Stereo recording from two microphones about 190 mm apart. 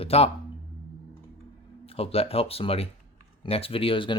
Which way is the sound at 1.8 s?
30° left (ahead or behind).